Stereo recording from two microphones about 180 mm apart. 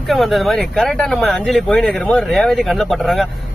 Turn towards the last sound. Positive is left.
turn(degrees=0)  # may be behind; listen again after turning